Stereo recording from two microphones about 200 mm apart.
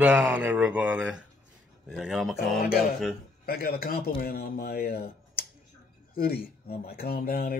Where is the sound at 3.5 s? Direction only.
50° left (ahead or behind).